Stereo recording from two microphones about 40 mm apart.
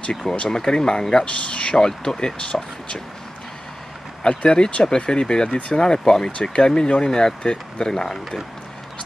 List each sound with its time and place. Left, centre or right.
0.1 s speech: centre
1.2 s speech: left
1.8 s speech: centre
4.2 s speech: left